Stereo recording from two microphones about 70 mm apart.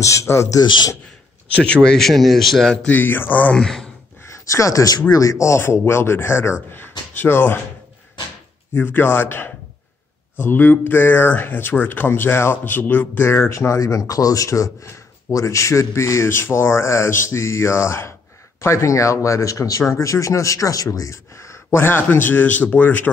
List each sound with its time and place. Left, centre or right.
0.0 s a man's voice: left
0.6 s a man's voice: left
1.5 s a man's voice: centre
2.9 s speech: left
3.5 s speech: centre
4.3 s speech: left
8.7 s speech: left
13.3 s a man's voice: left
21.7 s speech: left